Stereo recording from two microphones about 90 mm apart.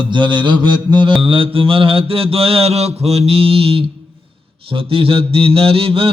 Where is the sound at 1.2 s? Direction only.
85° right.